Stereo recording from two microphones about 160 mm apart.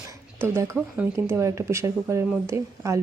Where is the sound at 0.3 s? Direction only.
15° right (ahead or behind).